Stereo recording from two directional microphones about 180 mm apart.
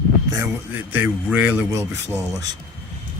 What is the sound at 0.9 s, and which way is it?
Speech, 10° right (ahead or behind).